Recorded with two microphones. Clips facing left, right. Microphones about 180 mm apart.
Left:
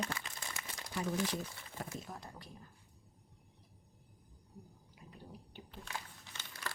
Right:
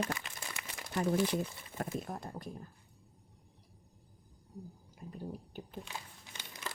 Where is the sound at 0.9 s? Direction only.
55° right (ahead or behind).